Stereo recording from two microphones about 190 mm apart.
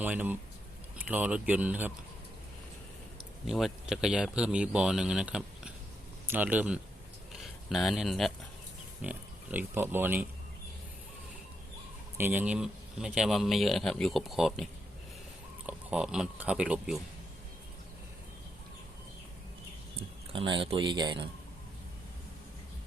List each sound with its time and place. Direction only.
0.0 s speech: 10° right (ahead or behind)
3.4 s speech: centre (ahead or behind)
7.3 s a sound: centre (ahead or behind)
9.0 s speech: 10° right (ahead or behind)
12.1 s speech: 10° right (ahead or behind)
20.3 s speech: 25° right (ahead or behind)